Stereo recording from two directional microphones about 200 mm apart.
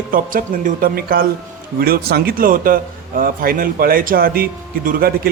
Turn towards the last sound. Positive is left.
turn(degrees=-50)  # may be behind; listen again after turning